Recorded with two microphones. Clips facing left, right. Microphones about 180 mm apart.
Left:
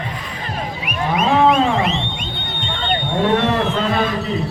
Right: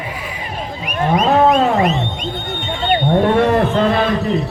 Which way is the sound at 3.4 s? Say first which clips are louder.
Right 4 dB; 50° right (ahead or behind).